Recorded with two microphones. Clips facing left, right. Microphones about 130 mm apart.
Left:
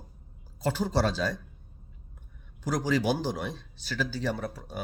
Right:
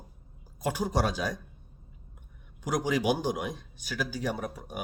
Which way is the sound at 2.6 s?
15° right (ahead or behind).